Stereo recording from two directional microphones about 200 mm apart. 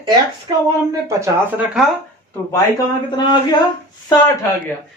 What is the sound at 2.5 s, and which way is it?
A man's voice, 20° left (ahead or behind).